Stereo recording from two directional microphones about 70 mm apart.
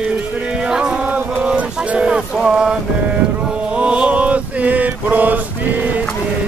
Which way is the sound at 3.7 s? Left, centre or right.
Centre.